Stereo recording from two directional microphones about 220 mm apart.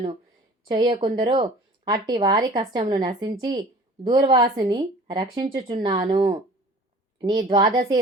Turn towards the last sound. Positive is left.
turn(degrees=-20)  # may be behind; listen again after turning